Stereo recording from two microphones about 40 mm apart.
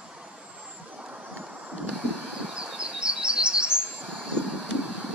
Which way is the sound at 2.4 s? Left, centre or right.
Right.